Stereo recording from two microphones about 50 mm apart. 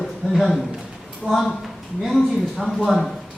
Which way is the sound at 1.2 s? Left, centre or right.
Right.